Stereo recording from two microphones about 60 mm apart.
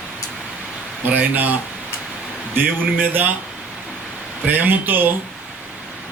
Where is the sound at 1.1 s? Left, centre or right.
Right.